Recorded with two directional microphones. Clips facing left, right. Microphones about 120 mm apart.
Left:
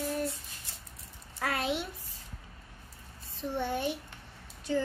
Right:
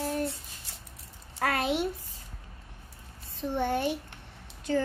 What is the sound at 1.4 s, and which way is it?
Speech, 55° right (ahead or behind).